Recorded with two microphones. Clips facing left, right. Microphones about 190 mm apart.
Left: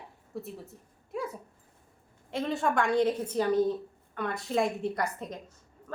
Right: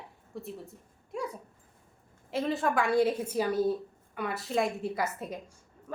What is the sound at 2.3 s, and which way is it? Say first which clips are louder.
A woman's voice: even; centre (ahead or behind).